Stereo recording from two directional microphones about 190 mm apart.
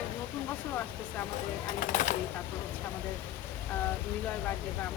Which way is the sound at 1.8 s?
40° left (ahead or behind).